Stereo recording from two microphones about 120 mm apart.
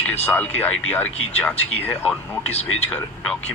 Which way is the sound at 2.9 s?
5° left (ahead or behind).